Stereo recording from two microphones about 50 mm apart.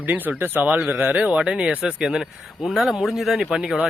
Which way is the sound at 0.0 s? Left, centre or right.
Right.